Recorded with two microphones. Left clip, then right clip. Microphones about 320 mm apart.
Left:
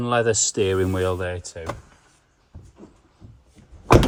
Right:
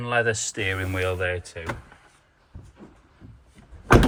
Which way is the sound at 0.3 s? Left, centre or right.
Left.